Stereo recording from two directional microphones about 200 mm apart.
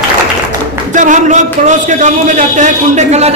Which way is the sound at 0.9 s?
40° right (ahead or behind).